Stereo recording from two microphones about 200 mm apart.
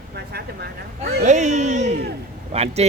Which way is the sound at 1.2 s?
35° right (ahead or behind).